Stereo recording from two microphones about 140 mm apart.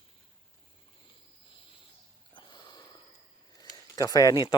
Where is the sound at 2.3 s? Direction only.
35° left (ahead or behind).